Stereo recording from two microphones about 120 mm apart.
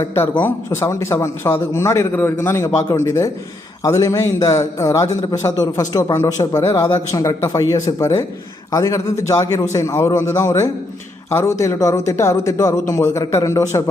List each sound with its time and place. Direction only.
0.4 s a man's voice: 20° left (ahead or behind)